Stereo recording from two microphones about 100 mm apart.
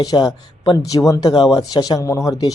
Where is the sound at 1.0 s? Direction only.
30° left (ahead or behind).